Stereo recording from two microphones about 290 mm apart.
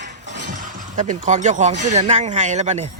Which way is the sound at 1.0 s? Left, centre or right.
Right.